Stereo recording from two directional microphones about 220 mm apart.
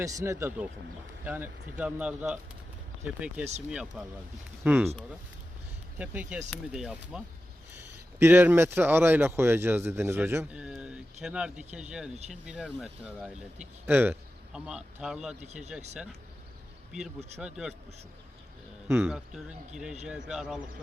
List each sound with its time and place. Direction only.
0.0 s speech: 15° right (ahead or behind)
6.0 s speech: 5° right (ahead or behind)
8.2 s speech: 10° right (ahead or behind)
15.4 s speech: 30° right (ahead or behind)
17.2 s speech: 30° right (ahead or behind)
17.4 s speech: 5° right (ahead or behind)
18.9 s speech: 5° right (ahead or behind)